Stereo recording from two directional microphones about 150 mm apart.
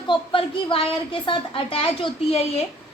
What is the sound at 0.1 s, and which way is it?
A woman's voice, 35° left (ahead or behind).